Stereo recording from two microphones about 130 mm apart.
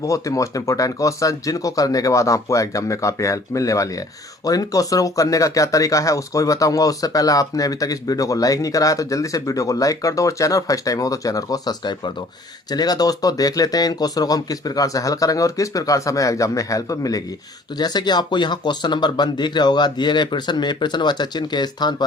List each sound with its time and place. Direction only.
0.0 s speech: 25° left (ahead or behind)